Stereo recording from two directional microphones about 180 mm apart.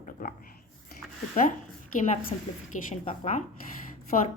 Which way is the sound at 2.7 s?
40° left (ahead or behind).